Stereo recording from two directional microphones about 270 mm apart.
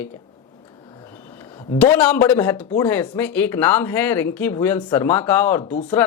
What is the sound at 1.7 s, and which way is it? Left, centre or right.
Speech, centre.